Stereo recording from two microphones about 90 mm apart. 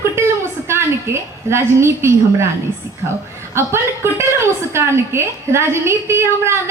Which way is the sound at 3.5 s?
30° right (ahead or behind).